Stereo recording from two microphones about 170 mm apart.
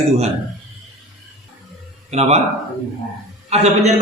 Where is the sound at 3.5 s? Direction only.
40° right (ahead or behind).